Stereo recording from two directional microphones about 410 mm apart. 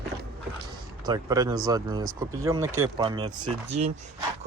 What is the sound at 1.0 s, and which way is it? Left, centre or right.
Speech, centre.